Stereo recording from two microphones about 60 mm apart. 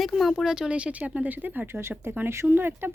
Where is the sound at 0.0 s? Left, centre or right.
Centre.